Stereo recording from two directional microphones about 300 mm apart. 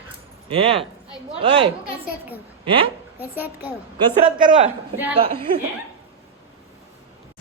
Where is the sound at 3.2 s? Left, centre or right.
Centre.